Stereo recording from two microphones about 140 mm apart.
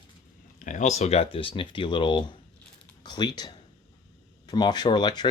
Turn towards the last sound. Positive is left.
turn(degrees=30)  # may be behind; listen again after turning